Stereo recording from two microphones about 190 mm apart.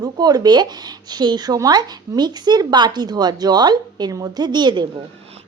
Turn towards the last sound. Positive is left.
turn(degrees=-25)  # may be behind; listen again after turning